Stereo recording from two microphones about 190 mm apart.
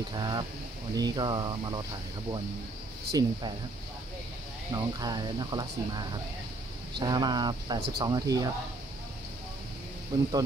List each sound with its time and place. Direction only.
0.1 s speech: 20° right (ahead or behind)
3.1 s speech: 20° right (ahead or behind)
4.7 s speech: 20° right (ahead or behind)